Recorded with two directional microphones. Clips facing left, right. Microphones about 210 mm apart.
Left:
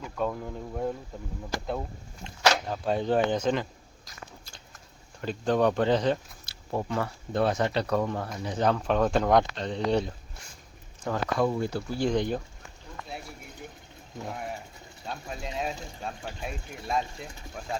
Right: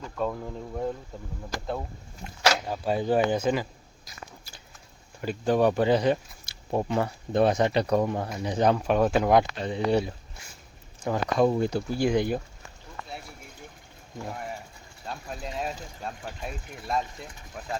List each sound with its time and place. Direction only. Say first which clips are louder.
0.2 s speech: even; centre (ahead or behind)
2.6 s speech: right 1 dB; 5° right (ahead or behind)
14.3 s speech: left 1 dB; centre (ahead or behind)